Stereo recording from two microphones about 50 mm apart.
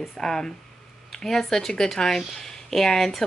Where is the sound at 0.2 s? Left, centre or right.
Centre.